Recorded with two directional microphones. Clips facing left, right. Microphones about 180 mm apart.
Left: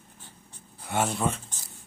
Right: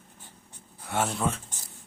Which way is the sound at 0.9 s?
Centre (ahead or behind).